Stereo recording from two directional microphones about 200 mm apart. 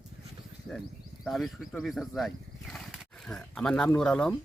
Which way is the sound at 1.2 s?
Centre (ahead or behind).